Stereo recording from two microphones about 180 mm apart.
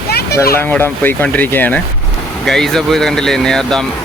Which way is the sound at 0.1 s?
60° left (ahead or behind).